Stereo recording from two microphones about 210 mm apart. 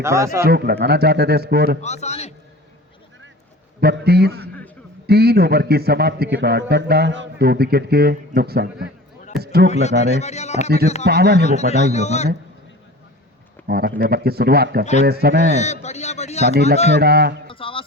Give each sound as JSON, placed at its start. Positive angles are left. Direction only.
{"t": 0.0, "sound": "speech", "side_deg": -15}
{"t": 0.4, "sound": "a man's voice", "side_deg": -50}
{"t": 1.8, "sound": "a man's voice", "side_deg": 30}
{"t": 3.8, "sound": "a man's voice", "side_deg": -50}
{"t": 10.0, "sound": "a man's voice", "side_deg": 30}
{"t": 11.0, "sound": "a man's voice", "side_deg": -50}
{"t": 11.4, "sound": "a man's voice", "side_deg": 30}
{"t": 13.7, "sound": "a man's voice", "side_deg": -50}
{"t": 15.4, "sound": "a man's voice", "side_deg": 35}
{"t": 17.0, "sound": "a man's voice", "side_deg": -50}
{"t": 17.5, "sound": "music", "side_deg": 25}